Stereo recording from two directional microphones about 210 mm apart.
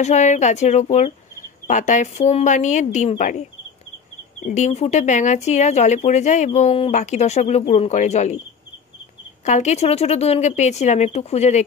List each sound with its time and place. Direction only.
0.0 s speech: 35° left (ahead or behind)
9.4 s speech: 35° left (ahead or behind)